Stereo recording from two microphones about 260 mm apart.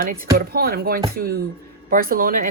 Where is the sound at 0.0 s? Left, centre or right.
Right.